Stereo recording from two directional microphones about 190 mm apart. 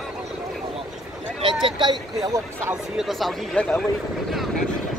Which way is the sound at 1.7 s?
25° right (ahead or behind).